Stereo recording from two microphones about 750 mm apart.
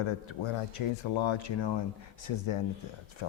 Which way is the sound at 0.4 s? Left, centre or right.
Left.